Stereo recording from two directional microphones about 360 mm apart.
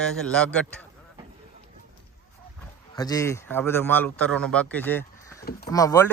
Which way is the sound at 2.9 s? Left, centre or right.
Centre.